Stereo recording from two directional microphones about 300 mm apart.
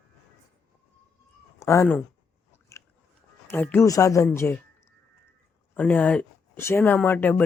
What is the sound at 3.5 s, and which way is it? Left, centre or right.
Speech, centre.